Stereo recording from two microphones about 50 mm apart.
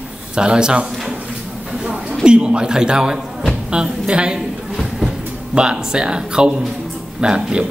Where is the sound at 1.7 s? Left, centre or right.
Centre.